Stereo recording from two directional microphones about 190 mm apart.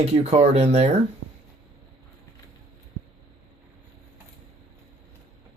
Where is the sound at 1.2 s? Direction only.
90° right.